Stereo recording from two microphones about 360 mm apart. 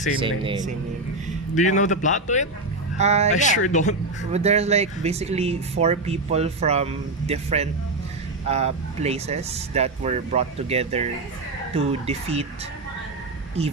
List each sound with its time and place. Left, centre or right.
0.2 s speech: centre
1.5 s a man's voice: left
3.0 s speech: centre
3.3 s a man's voice: left
4.3 s speech: centre
13.6 s speech: centre